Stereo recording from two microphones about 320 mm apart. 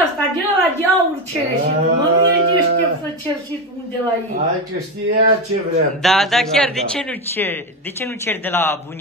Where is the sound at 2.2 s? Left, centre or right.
Right.